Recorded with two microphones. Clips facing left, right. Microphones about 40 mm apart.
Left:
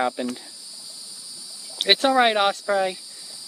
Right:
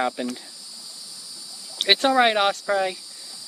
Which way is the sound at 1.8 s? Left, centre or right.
Centre.